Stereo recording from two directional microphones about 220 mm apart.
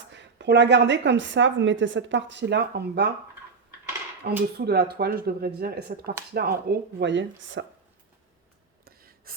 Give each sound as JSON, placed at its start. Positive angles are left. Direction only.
{"t": 0.1, "sound": "a woman's voice", "side_deg": -55}
{"t": 4.5, "sound": "speech", "side_deg": -45}
{"t": 8.8, "sound": "a sound", "side_deg": -40}